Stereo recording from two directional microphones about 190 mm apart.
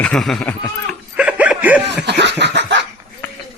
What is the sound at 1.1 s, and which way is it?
Snicker, 5° right (ahead or behind).